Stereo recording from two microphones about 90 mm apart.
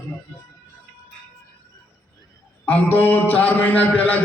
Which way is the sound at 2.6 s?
20° left (ahead or behind).